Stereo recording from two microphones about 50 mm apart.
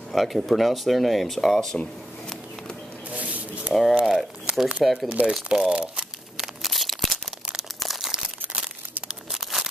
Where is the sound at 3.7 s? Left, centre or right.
Centre.